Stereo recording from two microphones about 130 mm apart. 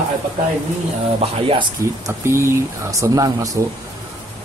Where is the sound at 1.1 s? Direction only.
45° right (ahead or behind).